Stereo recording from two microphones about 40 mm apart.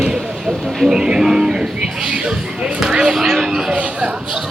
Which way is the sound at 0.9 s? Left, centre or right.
Centre.